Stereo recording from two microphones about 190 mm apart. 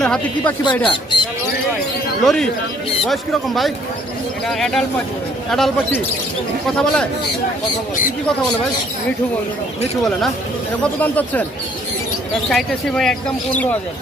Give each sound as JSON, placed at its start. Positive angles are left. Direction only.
{"t": 0.0, "sound": "speech", "side_deg": 5}
{"t": 0.9, "sound": "speech", "side_deg": 25}
{"t": 2.2, "sound": "speech", "side_deg": 0}
{"t": 11.0, "sound": "speech", "side_deg": 10}
{"t": 12.5, "sound": "speech", "side_deg": 0}